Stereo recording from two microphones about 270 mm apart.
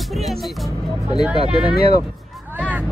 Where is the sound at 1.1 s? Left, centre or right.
Centre.